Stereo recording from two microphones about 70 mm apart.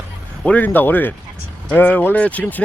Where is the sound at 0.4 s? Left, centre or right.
Left.